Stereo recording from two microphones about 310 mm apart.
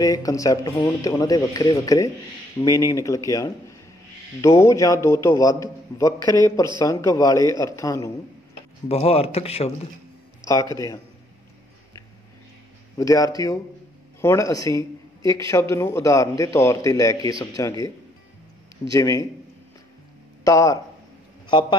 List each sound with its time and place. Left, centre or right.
0.0 s speech: centre
12.9 s a man's voice: centre
20.4 s a man's voice: centre